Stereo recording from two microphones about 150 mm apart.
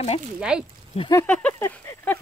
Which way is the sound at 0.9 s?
45° left (ahead or behind).